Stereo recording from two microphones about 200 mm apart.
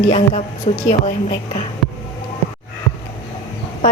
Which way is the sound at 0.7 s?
35° left (ahead or behind).